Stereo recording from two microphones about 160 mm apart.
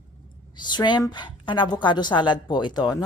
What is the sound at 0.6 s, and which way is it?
A woman's voice, 30° left (ahead or behind).